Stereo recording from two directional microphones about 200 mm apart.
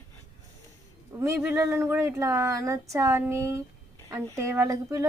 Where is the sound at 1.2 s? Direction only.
15° right (ahead or behind).